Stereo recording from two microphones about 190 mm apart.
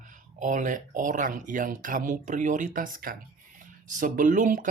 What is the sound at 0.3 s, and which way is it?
Speech, 40° right (ahead or behind).